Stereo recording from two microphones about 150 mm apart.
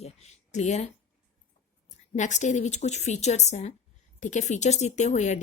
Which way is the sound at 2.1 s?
55° left (ahead or behind).